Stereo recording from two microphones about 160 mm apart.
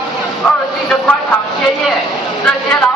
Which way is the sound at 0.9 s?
Centre (ahead or behind).